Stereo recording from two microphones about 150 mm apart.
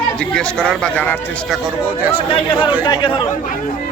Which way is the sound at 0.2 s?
5° left (ahead or behind).